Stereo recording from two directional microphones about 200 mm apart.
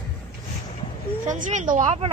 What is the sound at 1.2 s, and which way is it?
Speech, 40° right (ahead or behind).